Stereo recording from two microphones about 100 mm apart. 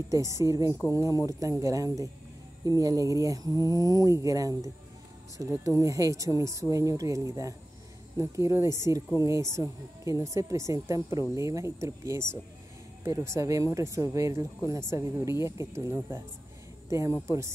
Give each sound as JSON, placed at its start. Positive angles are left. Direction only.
{"t": 0.1, "sound": "a woman's voice", "side_deg": -30}
{"t": 17.3, "sound": "a woman's voice", "side_deg": -30}